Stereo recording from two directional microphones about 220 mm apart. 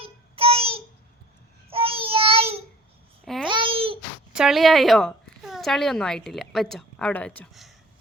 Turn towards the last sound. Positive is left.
turn(degrees=5)  # may be behind; listen again after turning